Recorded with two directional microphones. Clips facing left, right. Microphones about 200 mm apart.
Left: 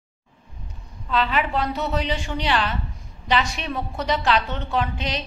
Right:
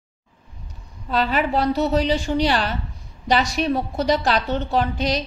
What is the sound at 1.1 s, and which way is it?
A woman's voice, 40° right (ahead or behind).